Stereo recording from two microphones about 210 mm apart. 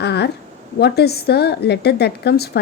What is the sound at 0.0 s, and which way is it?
A woman's voice, 50° left (ahead or behind).